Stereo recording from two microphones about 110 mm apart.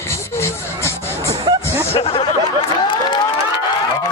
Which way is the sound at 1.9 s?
60° left (ahead or behind).